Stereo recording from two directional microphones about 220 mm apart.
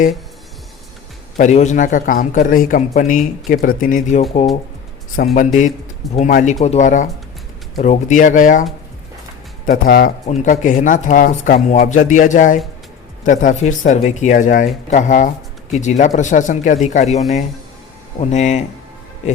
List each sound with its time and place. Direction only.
1.4 s speech: 30° left (ahead or behind)
9.6 s speech: 40° left (ahead or behind)
18.2 s speech: 30° left (ahead or behind)